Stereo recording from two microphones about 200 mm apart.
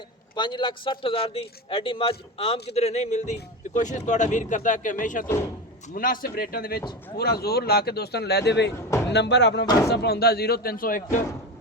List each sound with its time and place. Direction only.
0.3 s a man's voice: 25° left (ahead or behind); by 11.2 s 45° left (ahead or behind)